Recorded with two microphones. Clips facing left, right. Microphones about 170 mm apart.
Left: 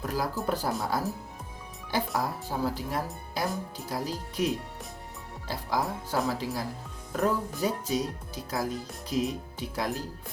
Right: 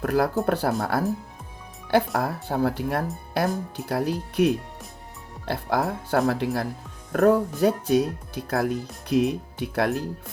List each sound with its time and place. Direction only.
0.0 s speech: 65° right (ahead or behind)
2.1 s speech: 65° right (ahead or behind)